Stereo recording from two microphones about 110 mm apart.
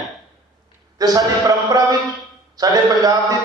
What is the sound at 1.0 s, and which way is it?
A man's voice, 35° right (ahead or behind).